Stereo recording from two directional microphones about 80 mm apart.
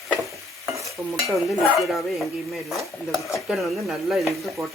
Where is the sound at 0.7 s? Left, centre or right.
Right.